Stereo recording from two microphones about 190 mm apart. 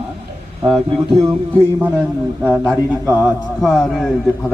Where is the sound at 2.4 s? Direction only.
5° right (ahead or behind).